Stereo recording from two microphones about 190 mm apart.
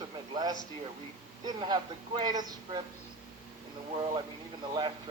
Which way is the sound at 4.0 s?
25° right (ahead or behind).